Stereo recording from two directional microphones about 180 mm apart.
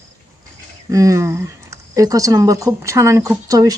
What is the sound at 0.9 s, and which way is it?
Speech, 20° right (ahead or behind).